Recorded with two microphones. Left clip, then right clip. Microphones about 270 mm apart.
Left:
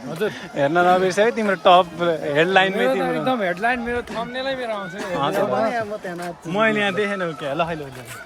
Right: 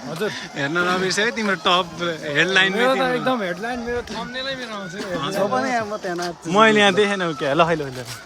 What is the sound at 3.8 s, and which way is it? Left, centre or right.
Speech, left.